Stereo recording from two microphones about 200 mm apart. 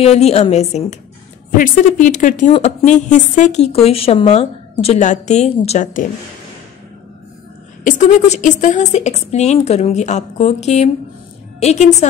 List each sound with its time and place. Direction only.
0.0 s a woman's voice: 30° left (ahead or behind)
7.8 s a woman's voice: 40° left (ahead or behind)